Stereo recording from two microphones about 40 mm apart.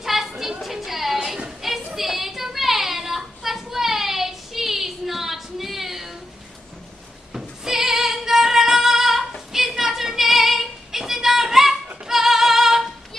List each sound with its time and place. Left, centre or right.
0.0 s a sound: centre
0.4 s chatter: centre
1.6 s a sound: centre
2.0 s child singing: centre
7.3 s music: centre
9.5 s child singing: centre
12.1 s music: centre